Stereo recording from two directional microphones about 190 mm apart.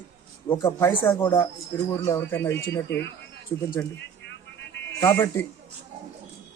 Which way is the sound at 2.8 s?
65° left (ahead or behind).